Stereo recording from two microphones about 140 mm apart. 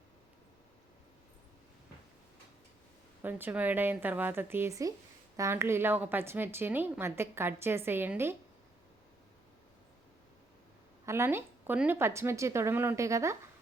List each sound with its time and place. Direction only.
3.2 s a woman's voice: 15° right (ahead or behind)
11.0 s a woman's voice: 20° right (ahead or behind)